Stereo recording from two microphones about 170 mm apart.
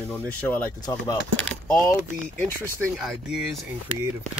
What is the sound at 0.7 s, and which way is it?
Speech, 25° left (ahead or behind).